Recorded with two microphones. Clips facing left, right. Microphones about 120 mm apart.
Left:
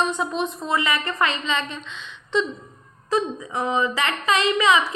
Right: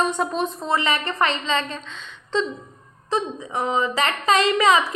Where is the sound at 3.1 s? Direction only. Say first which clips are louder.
Left 1 dB; 30° right (ahead or behind).